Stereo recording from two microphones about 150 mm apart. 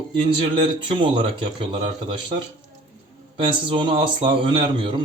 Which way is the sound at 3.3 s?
35° right (ahead or behind).